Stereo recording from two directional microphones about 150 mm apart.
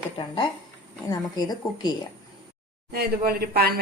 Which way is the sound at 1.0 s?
25° left (ahead or behind).